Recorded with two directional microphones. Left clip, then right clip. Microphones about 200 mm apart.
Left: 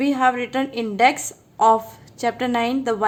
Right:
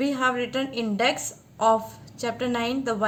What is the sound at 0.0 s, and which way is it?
A woman's voice, 35° left (ahead or behind).